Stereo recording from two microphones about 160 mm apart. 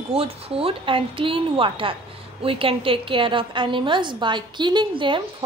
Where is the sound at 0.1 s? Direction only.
35° right (ahead or behind).